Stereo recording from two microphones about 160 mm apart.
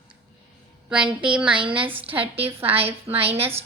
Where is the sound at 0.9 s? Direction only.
5° right (ahead or behind).